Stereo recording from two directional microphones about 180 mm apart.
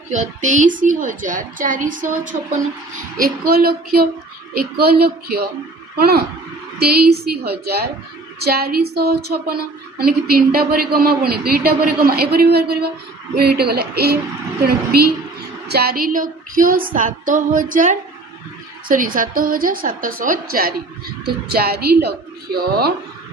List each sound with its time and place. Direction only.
0.1 s a woman's voice: 40° right (ahead or behind); by 14.2 s 60° right (ahead or behind)
15.7 s a woman's voice: 60° right (ahead or behind)